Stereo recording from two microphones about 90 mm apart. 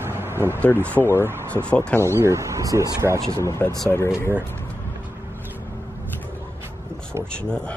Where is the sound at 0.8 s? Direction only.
20° left (ahead or behind).